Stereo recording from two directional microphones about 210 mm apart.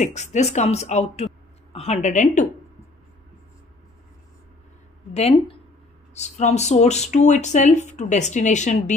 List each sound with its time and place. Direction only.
0.0 s speech: 35° left (ahead or behind)
5.1 s speech: 30° left (ahead or behind)